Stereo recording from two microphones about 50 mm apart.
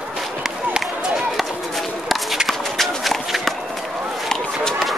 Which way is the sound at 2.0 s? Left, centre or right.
Centre.